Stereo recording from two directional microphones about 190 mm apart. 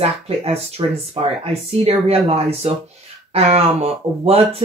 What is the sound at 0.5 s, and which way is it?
Speech, 30° right (ahead or behind).